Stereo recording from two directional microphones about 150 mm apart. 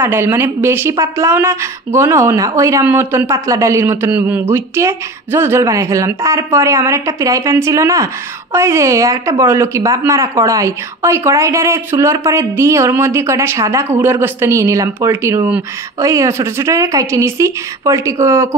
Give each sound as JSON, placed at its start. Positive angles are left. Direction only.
{"t": 0.0, "sound": "a woman's voice", "side_deg": -15}